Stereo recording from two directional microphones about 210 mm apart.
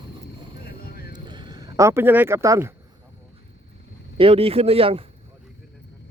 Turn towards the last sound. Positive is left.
turn(degrees=-25)  # may be behind; listen again after turning